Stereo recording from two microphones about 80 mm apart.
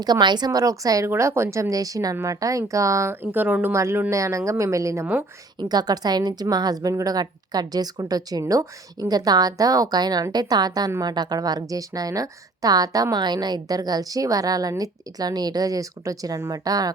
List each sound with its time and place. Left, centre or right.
0.0 s a woman's voice: right
1.1 s a woman's voice: right
3.3 s speech: right
3.7 s speech: right
5.5 s a woman's voice: right